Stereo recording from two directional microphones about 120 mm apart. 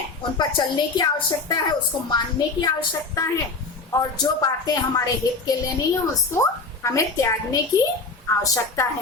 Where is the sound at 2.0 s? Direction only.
35° left (ahead or behind).